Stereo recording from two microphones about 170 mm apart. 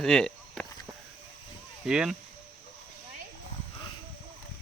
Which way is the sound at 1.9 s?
5° right (ahead or behind).